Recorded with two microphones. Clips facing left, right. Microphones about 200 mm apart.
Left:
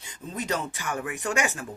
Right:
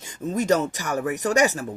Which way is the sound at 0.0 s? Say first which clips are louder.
Right 9 dB; 45° right (ahead or behind).